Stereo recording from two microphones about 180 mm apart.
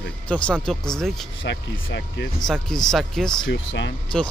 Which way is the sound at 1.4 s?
70° left (ahead or behind).